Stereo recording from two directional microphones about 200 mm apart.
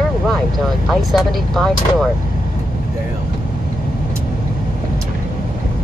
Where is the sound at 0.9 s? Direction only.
Centre (ahead or behind).